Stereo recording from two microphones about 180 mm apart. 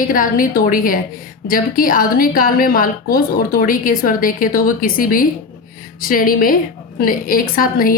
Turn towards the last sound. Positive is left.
turn(degrees=55)  # may be behind; listen again after turning